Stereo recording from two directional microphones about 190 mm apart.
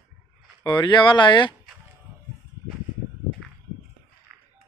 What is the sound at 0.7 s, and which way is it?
Speech, 25° left (ahead or behind).